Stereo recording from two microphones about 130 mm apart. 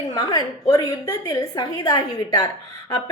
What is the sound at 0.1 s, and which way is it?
Speech, 30° left (ahead or behind).